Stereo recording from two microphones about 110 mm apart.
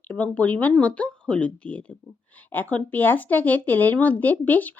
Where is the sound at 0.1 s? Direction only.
15° left (ahead or behind).